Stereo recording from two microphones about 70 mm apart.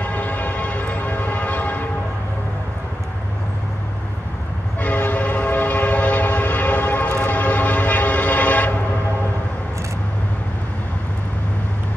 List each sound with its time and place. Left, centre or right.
0.0 s train: left
4.7 s train: left